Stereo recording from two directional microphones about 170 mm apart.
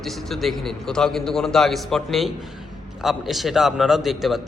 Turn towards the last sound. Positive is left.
turn(degrees=0)  # may be behind; listen again after turning